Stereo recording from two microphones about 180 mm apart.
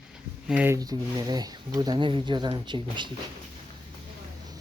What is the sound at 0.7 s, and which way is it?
Speech, 20° right (ahead or behind).